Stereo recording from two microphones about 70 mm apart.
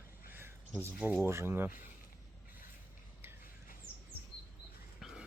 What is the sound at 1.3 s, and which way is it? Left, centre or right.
Speech, right.